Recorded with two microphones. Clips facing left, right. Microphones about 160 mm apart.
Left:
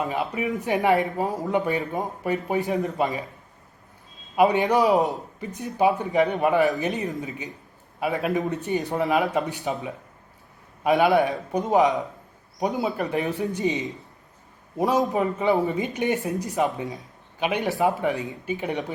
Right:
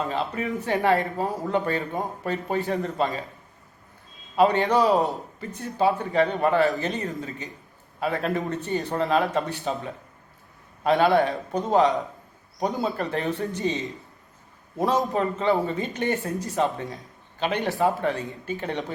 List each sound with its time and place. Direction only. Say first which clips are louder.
0.0 s speech: left 1 dB; 15° left (ahead or behind)
4.4 s speech: left 1 dB; 15° left (ahead or behind)
10.8 s speech: left 1 dB; 15° left (ahead or behind)
13.1 s speech: left 1 dB; 15° left (ahead or behind)